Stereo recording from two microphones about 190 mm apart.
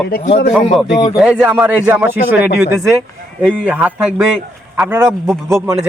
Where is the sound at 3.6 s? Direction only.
5° right (ahead or behind).